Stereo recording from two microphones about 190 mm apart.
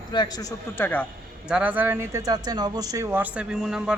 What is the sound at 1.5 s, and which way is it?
Speech, 5° right (ahead or behind).